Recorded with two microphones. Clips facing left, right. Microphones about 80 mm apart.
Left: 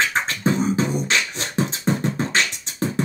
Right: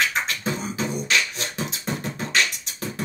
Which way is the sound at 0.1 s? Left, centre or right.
Left.